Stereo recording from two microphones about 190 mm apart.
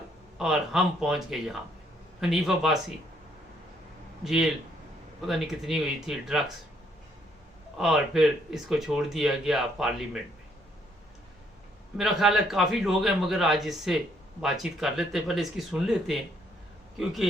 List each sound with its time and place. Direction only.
0.3 s speech: 5° right (ahead or behind)
4.2 s speech: centre (ahead or behind)
7.8 s speech: centre (ahead or behind)
11.9 s speech: centre (ahead or behind)